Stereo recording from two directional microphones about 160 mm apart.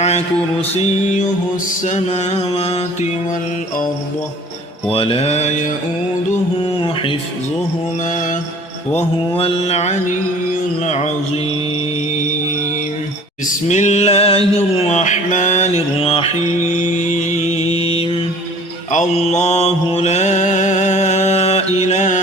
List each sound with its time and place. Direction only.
1.8 s mantra: 45° left (ahead or behind)
4.9 s music: 35° left (ahead or behind)
6.7 s music: 35° left (ahead or behind)
9.3 s music: 35° left (ahead or behind)
10.8 s mantra: 45° left (ahead or behind)
13.5 s music: 50° left (ahead or behind)
18.9 s mantra: 45° left (ahead or behind)
21.8 s music: 50° left (ahead or behind)